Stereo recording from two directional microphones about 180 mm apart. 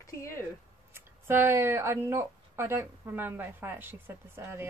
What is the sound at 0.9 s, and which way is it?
Speech, 15° right (ahead or behind).